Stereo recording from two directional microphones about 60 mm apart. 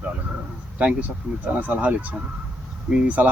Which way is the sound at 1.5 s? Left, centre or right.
Right.